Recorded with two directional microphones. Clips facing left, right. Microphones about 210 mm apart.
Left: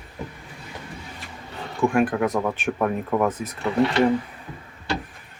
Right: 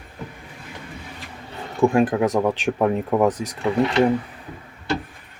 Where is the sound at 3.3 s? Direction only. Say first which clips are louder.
Right 4 dB; 80° right.